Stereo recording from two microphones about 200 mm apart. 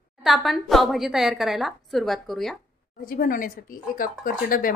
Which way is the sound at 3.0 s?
45° left (ahead or behind).